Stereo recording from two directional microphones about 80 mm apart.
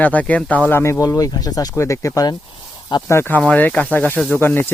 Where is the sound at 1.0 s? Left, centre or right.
Left.